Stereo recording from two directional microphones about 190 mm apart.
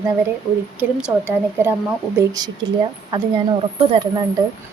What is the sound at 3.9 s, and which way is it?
Speech, 25° right (ahead or behind).